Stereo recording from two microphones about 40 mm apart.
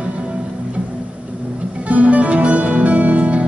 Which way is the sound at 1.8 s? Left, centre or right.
Right.